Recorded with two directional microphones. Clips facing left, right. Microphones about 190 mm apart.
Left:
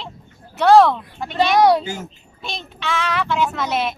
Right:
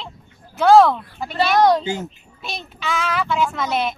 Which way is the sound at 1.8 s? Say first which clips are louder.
Right 4 dB; 20° right (ahead or behind).